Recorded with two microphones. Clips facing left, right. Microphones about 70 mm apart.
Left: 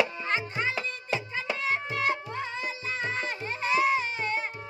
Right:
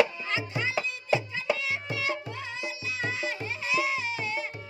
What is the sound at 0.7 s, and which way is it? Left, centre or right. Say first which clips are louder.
Music: right 4 dB; centre.